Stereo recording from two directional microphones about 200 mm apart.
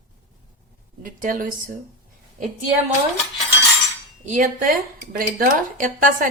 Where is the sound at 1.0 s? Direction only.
40° right (ahead or behind).